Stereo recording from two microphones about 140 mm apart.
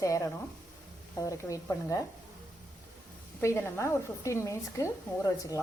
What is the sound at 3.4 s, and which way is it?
Speech, 20° left (ahead or behind).